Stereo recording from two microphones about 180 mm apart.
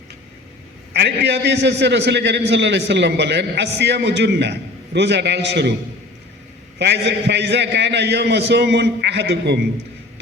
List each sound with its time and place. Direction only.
0.9 s a man's voice: 70° right (ahead or behind)
6.7 s a man's voice: 70° right (ahead or behind)